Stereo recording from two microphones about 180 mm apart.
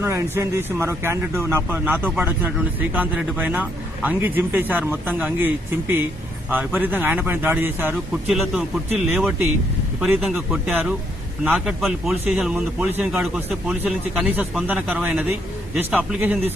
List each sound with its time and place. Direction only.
0.0 s a man's voice: 15° right (ahead or behind)
6.7 s a man's voice: 10° right (ahead or behind)